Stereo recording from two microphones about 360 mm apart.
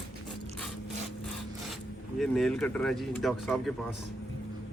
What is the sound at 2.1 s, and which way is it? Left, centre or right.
Speech, centre.